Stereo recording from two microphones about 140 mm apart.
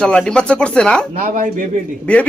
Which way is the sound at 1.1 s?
70° right (ahead or behind).